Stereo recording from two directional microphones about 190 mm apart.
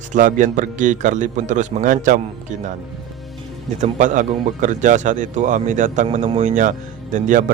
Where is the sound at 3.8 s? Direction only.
40° right (ahead or behind).